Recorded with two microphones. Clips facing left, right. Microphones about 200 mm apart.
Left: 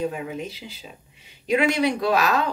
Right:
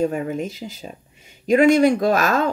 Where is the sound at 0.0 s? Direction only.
45° right (ahead or behind).